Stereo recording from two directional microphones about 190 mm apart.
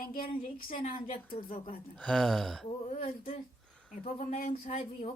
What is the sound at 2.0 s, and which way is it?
Speech, 5° left (ahead or behind).